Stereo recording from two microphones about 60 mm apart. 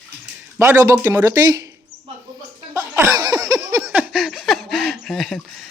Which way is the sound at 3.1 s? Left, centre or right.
Right.